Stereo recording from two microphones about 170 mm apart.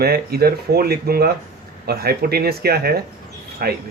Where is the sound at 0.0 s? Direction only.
65° right (ahead or behind).